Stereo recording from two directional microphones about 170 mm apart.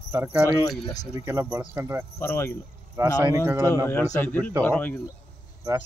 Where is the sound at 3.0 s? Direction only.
15° right (ahead or behind).